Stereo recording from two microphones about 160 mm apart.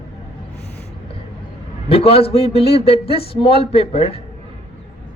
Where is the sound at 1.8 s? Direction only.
35° left (ahead or behind).